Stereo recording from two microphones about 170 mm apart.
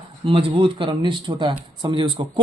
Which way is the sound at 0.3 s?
30° right (ahead or behind).